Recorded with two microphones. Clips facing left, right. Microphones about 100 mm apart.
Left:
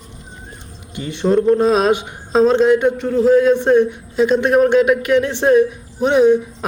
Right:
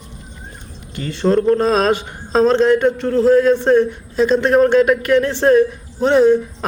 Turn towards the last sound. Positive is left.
turn(degrees=10)  # may be behind; listen again after turning